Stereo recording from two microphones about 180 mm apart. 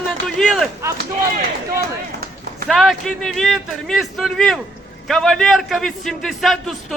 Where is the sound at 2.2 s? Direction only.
60° right (ahead or behind).